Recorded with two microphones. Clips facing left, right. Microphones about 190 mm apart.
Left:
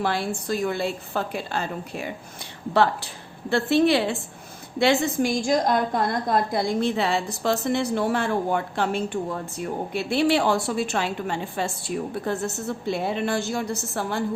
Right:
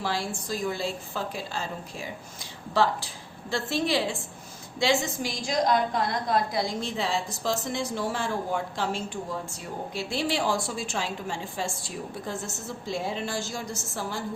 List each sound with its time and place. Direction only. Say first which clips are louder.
0.0 s a woman's voice: left 5 dB; 60° left (ahead or behind)
3.5 s a woman's voice: left 7 dB; 60° left (ahead or behind)